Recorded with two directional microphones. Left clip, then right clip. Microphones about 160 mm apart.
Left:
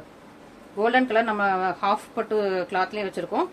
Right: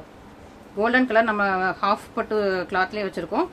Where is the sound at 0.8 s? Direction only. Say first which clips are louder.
Right 2 dB; 30° right (ahead or behind).